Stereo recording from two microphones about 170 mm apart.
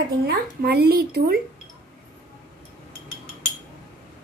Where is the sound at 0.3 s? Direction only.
65° right (ahead or behind).